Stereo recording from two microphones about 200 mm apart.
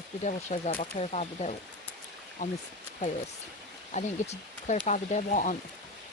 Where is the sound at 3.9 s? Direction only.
35° left (ahead or behind).